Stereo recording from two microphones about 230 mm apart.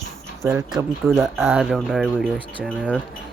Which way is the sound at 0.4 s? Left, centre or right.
Centre.